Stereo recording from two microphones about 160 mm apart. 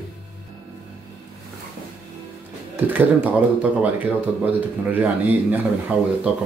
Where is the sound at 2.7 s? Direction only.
10° right (ahead or behind).